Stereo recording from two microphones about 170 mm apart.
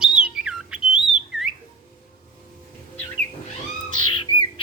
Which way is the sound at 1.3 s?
Centre (ahead or behind).